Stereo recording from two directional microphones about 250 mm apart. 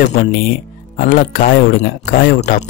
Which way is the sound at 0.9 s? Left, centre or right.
Left.